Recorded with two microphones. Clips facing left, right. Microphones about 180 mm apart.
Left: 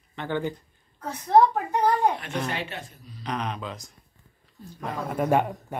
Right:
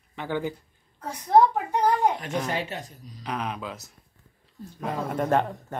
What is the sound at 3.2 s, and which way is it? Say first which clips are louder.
Speech: even; 5° right (ahead or behind).